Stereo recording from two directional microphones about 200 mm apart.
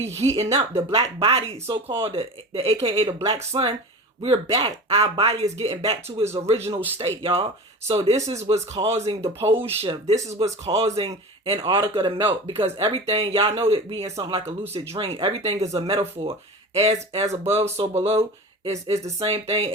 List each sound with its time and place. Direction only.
0.0 s speech: 30° right (ahead or behind)
1.6 s speech: 15° right (ahead or behind)
2.0 s speech: 25° right (ahead or behind)